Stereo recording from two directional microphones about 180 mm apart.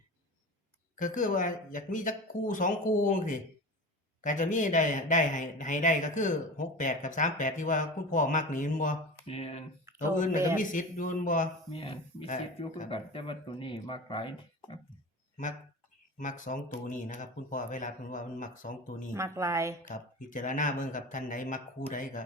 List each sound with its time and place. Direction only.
0.9 s speech: 45° left (ahead or behind)
10.6 s speech: 45° left (ahead or behind)
11.7 s speech: 30° left (ahead or behind)
16.1 s speech: 45° left (ahead or behind)
19.1 s a woman's voice: 15° right (ahead or behind)
19.9 s speech: 45° left (ahead or behind)